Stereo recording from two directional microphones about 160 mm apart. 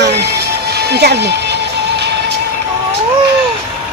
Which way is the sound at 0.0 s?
90° right.